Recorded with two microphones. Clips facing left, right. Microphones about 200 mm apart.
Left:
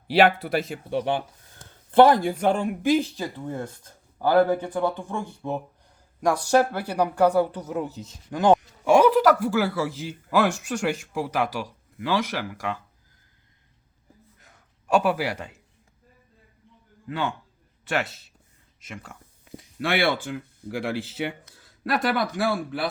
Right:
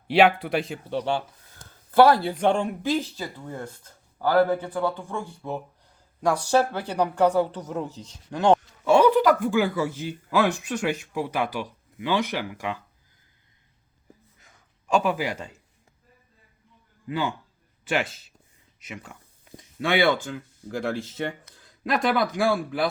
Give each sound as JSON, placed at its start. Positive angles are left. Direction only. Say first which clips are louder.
{"t": 0.1, "sound": "speech", "louder": "even", "side_deg": 0}
{"t": 14.3, "sound": "a sound", "louder": "left 2 dB", "side_deg": 5}
{"t": 17.1, "sound": "speech", "louder": "right 1 dB", "side_deg": -5}
{"t": 19.5, "sound": "speech", "louder": "right 2 dB", "side_deg": 5}